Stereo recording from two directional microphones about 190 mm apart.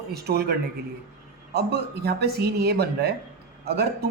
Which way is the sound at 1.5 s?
55° right (ahead or behind).